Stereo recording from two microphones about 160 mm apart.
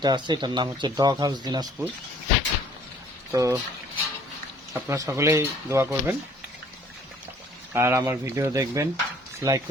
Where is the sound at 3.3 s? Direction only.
20° right (ahead or behind).